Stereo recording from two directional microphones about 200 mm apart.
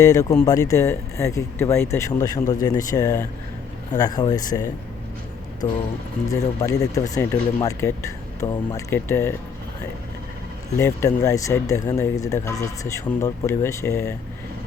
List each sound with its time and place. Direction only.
0.0 s speech: 15° left (ahead or behind)
6.6 s speech: 15° left (ahead or behind)
10.8 s speech: 15° left (ahead or behind)